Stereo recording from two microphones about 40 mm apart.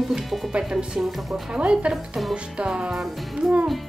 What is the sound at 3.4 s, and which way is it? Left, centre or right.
Speech, centre.